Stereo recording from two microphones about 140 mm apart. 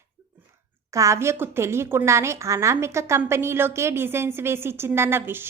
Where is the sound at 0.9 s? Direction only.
20° right (ahead or behind).